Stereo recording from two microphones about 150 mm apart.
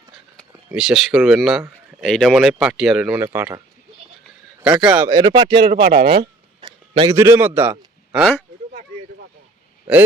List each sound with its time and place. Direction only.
0.8 s a man's voice: centre (ahead or behind); by 3.6 s 15° right (ahead or behind)
4.6 s a man's voice: 5° right (ahead or behind)
5.0 s speech: 25° right (ahead or behind)
5.6 s speech: 90° right
6.6 s a sound: 30° right (ahead or behind)
7.1 s a man's voice: 20° right (ahead or behind)
8.1 s speech: centre (ahead or behind)